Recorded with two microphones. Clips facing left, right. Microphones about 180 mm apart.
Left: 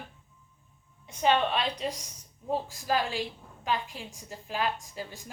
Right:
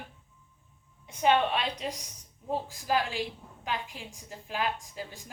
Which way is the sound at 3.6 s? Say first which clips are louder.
Left 4 dB; 15° right (ahead or behind).